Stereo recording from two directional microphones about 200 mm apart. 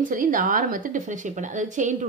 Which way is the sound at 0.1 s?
45° right (ahead or behind).